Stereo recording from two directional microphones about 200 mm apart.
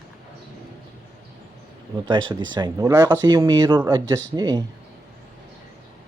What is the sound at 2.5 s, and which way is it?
Speech, 15° right (ahead or behind).